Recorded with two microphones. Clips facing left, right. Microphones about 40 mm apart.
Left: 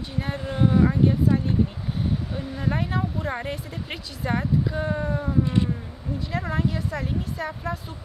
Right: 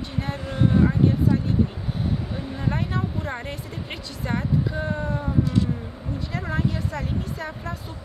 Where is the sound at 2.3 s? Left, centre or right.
Centre.